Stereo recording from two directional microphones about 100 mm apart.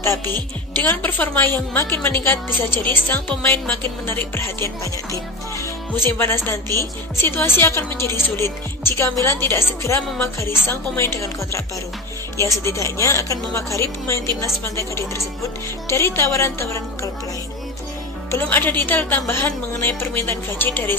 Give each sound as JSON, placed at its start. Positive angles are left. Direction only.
{"t": 0.0, "sound": "speech", "side_deg": 30}
{"t": 0.8, "sound": "speech", "side_deg": 20}
{"t": 18.3, "sound": "speech", "side_deg": 20}